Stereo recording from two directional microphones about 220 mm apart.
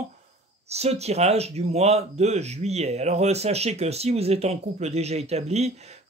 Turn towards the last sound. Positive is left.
turn(degrees=-30)  # may be behind; listen again after turning